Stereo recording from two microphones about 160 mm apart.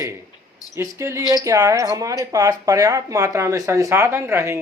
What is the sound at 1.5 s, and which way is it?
Speech, 20° right (ahead or behind).